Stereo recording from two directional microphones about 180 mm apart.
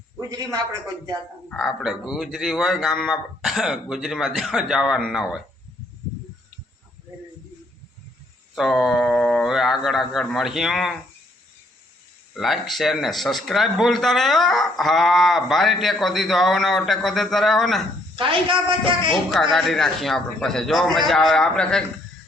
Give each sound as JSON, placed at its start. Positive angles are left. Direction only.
{"t": 0.2, "sound": "a man's voice", "side_deg": -20}
{"t": 1.5, "sound": "a man's voice", "side_deg": 0}
{"t": 8.5, "sound": "a man's voice", "side_deg": 0}
{"t": 12.3, "sound": "a man's voice", "side_deg": 0}
{"t": 18.2, "sound": "a man's voice", "side_deg": -30}
{"t": 19.5, "sound": "a man's voice", "side_deg": 0}